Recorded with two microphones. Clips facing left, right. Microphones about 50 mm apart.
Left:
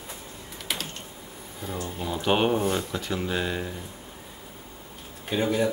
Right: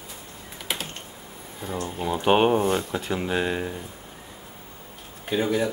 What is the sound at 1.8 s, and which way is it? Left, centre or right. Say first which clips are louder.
Speech: right 4 dB; right.